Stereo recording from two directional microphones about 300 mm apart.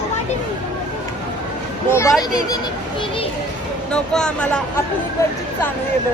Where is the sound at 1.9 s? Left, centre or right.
Centre.